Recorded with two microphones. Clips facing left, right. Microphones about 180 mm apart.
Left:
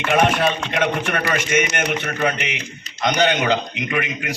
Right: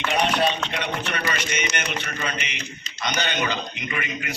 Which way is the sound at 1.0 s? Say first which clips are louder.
Left 5 dB; 50° left (ahead or behind).